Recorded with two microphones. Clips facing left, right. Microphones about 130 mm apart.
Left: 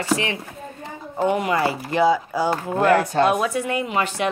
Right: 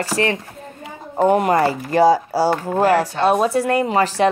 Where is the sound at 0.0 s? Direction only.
40° right (ahead or behind).